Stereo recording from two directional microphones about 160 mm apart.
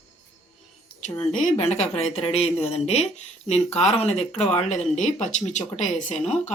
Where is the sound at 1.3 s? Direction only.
55° left (ahead or behind).